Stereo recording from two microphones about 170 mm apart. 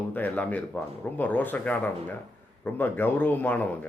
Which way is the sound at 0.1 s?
10° left (ahead or behind).